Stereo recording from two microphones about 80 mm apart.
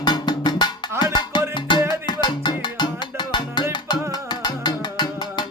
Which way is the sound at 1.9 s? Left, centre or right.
Left.